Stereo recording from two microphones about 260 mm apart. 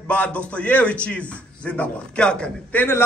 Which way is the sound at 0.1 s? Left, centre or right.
Centre.